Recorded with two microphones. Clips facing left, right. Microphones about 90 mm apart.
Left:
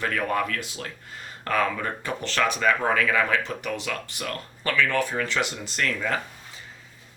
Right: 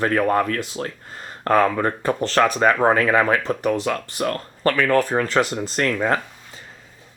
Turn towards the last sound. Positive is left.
turn(degrees=-40)  # may be behind; listen again after turning